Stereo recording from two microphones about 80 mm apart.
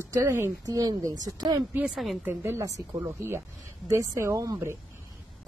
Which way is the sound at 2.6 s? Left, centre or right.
Right.